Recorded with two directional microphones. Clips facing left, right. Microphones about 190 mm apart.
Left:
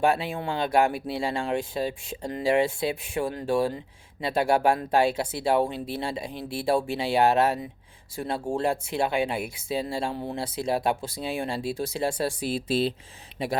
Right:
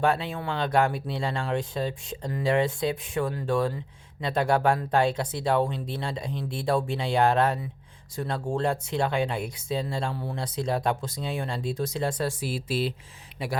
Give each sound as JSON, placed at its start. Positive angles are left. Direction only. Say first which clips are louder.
{"t": 0.0, "sound": "speech", "louder": "left 1 dB", "side_deg": 10}
{"t": 10.1, "sound": "speech", "louder": "left 2 dB", "side_deg": 25}
{"t": 10.3, "sound": "speech", "louder": "even", "side_deg": 10}